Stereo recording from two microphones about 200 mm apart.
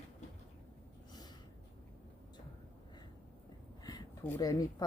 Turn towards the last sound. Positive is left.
turn(degrees=20)  # may be behind; listen again after turning